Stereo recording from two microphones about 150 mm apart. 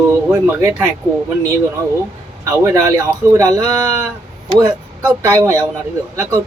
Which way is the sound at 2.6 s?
20° right (ahead or behind).